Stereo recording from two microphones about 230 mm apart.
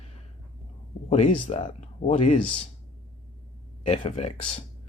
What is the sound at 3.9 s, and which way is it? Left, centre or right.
Speech, left.